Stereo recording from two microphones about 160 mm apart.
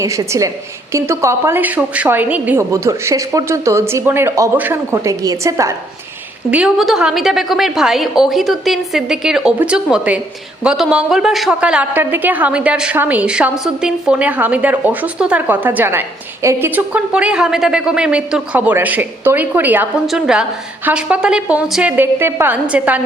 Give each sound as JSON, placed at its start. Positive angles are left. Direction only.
{"t": 0.0, "sound": "a woman's voice", "side_deg": -20}
{"t": 6.5, "sound": "a woman's voice", "side_deg": -5}